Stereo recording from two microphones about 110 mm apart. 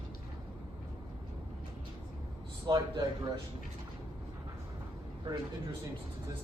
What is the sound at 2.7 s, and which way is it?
Speech, 35° right (ahead or behind).